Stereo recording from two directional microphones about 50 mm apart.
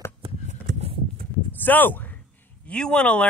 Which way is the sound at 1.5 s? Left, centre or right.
Left.